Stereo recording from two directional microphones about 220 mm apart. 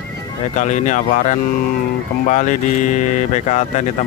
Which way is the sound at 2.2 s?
35° left (ahead or behind).